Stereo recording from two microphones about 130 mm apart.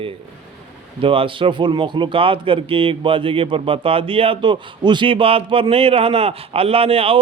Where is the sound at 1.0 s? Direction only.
45° right (ahead or behind).